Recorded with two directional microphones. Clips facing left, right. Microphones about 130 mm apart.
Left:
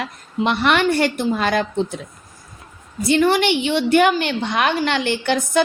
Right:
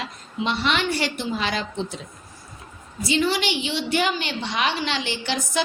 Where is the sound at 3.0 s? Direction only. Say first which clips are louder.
Left 7 dB; 55° left (ahead or behind).